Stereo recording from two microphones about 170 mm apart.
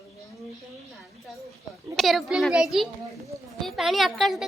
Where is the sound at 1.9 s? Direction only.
Centre (ahead or behind).